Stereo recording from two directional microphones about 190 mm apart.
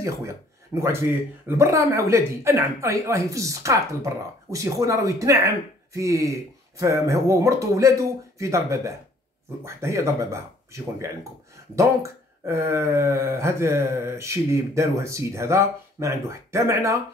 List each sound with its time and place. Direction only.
0.0 s speech: 15° right (ahead or behind)